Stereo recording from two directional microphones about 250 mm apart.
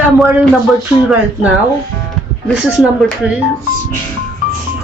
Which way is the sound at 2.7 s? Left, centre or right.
Centre.